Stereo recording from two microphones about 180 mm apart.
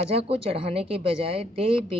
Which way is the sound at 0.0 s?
35° right (ahead or behind).